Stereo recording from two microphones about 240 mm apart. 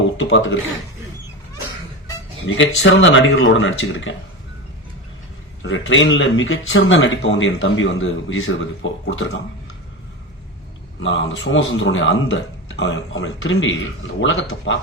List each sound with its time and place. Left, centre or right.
0.2 s speech: left
2.6 s speech: left
5.6 s speech: left
11.0 s speech: left